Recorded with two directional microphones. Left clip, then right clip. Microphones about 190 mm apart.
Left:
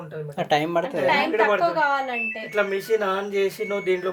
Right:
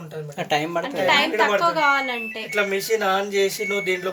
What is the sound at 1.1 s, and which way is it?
A woman's voice, 55° right (ahead or behind).